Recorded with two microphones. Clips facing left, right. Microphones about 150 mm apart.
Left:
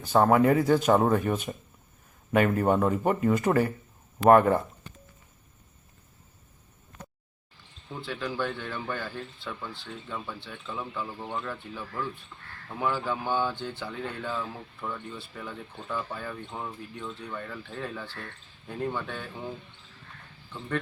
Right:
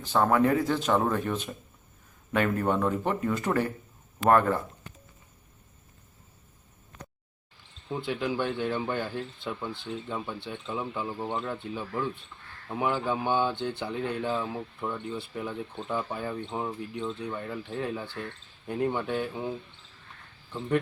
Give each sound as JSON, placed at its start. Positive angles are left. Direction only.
{"t": 0.3, "sound": "speech", "side_deg": 5}
{"t": 2.3, "sound": "speech", "side_deg": 5}
{"t": 4.2, "sound": "speech", "side_deg": 15}
{"t": 7.9, "sound": "speech", "side_deg": -20}